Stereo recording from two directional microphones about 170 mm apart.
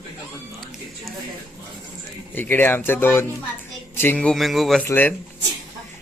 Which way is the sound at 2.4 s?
10° left (ahead or behind).